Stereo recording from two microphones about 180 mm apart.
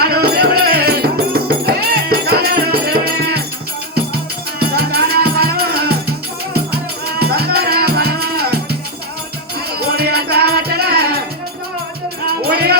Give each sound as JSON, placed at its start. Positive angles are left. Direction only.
{"t": 0.0, "sound": "music", "side_deg": -60}
{"t": 4.6, "sound": "music", "side_deg": -60}
{"t": 9.9, "sound": "music", "side_deg": -60}
{"t": 12.5, "sound": "music", "side_deg": -60}